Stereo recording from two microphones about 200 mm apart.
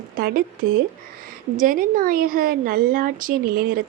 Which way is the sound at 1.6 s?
45° right (ahead or behind).